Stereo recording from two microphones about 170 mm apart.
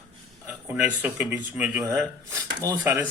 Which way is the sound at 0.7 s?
10° right (ahead or behind).